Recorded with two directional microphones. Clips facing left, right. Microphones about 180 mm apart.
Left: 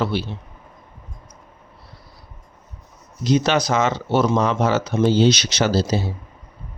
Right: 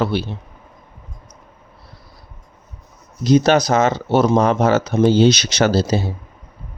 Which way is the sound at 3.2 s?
40° right (ahead or behind).